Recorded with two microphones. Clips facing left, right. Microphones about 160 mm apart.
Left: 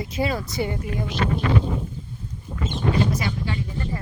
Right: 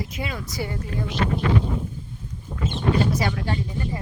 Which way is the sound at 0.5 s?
20° left (ahead or behind).